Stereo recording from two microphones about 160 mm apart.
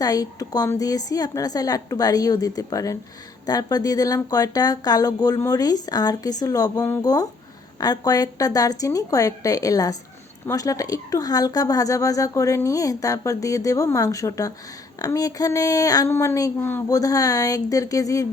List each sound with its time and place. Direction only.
0.0 s a woman's voice: 25° left (ahead or behind)